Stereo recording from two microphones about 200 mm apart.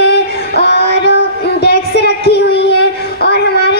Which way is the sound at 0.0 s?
60° left (ahead or behind).